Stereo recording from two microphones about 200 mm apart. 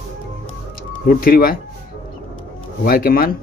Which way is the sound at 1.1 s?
45° left (ahead or behind).